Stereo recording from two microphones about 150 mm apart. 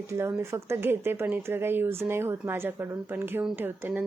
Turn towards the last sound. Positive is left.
turn(degrees=-15)  # may be behind; listen again after turning